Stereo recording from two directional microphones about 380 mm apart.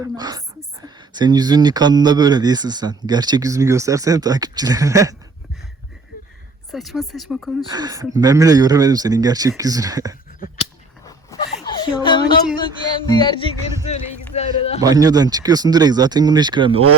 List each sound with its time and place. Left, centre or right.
0.2 s speech: centre
6.7 s speech: centre
7.7 s speech: centre
11.0 s a sound: centre
13.1 s music: centre
14.8 s speech: centre